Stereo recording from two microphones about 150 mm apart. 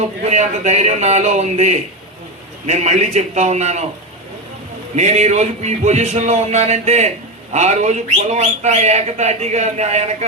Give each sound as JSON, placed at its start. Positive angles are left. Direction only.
{"t": 0.3, "sound": "speech", "side_deg": -50}
{"t": 4.9, "sound": "speech", "side_deg": -50}